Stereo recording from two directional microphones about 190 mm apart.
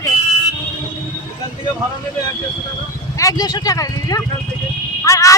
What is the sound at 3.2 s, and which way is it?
Speech, 20° left (ahead or behind).